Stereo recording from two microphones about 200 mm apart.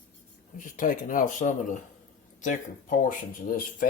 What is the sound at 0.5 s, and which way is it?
Speech, 40° left (ahead or behind).